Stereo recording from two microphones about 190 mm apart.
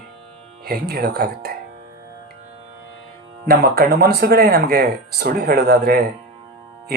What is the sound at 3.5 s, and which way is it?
Speech, 55° right (ahead or behind).